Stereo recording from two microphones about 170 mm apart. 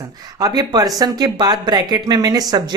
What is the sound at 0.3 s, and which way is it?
Speech, 20° right (ahead or behind).